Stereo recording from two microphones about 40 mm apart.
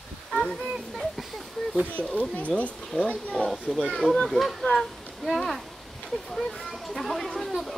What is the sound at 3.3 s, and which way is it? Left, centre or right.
Speech, centre.